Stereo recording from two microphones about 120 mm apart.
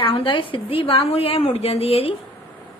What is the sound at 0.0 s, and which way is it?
A woman's voice, 50° left (ahead or behind).